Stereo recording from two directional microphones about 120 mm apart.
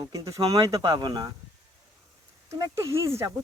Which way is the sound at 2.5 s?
25° right (ahead or behind).